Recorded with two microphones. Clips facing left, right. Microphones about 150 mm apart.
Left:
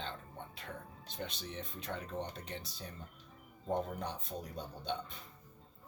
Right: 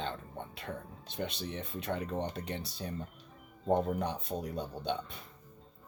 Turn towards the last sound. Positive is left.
turn(degrees=-65)  # may be behind; listen again after turning